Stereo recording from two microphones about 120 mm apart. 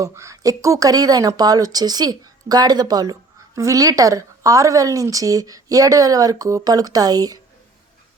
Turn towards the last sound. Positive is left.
turn(degrees=-30)  # may be behind; listen again after turning